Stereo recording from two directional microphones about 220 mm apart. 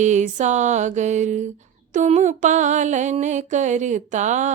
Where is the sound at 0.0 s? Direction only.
35° right (ahead or behind).